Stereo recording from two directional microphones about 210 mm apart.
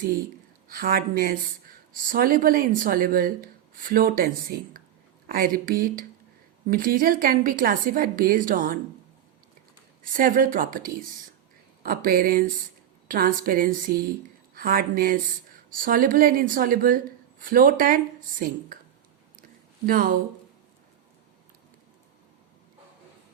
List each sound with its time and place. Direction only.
0.7 s a woman's voice: 45° right (ahead or behind)
10.0 s a woman's voice: 40° right (ahead or behind)
19.4 s a sound: 45° right (ahead or behind)